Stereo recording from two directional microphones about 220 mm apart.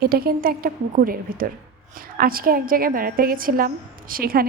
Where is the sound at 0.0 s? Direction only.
45° right (ahead or behind).